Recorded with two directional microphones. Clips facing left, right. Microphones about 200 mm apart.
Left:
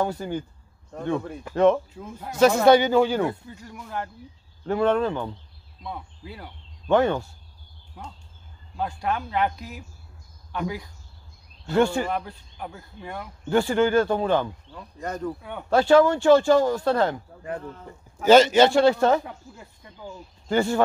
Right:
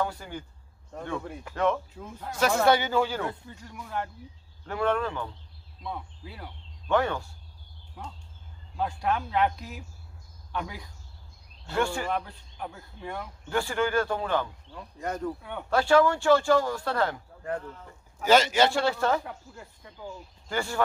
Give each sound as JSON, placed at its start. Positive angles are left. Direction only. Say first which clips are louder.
{"t": 0.0, "sound": "speech", "louder": "left 6 dB", "side_deg": 25}
{"t": 1.5, "sound": "speech", "louder": "left 8 dB", "side_deg": 25}
{"t": 3.6, "sound": "speech", "louder": "left 1 dB", "side_deg": 5}
{"t": 4.6, "sound": "speech", "louder": "left 6 dB", "side_deg": 25}
{"t": 5.9, "sound": "speech", "louder": "left 1 dB", "side_deg": 5}
{"t": 6.9, "sound": "speech", "louder": "left 5 dB", "side_deg": 25}
{"t": 8.7, "sound": "speech", "louder": "left 1 dB", "side_deg": 0}
{"t": 11.7, "sound": "speech", "louder": "left 7 dB", "side_deg": 25}
{"t": 12.1, "sound": "speech", "louder": "left 2 dB", "side_deg": 5}
{"t": 13.5, "sound": "speech", "louder": "left 7 dB", "side_deg": 25}
{"t": 14.7, "sound": "speech", "louder": "left 1 dB", "side_deg": -10}
{"t": 15.2, "sound": "speech", "louder": "left 2 dB", "side_deg": 5}
{"t": 15.7, "sound": "speech", "louder": "left 5 dB", "side_deg": 25}
{"t": 20.4, "sound": "speech", "louder": "left 8 dB", "side_deg": 25}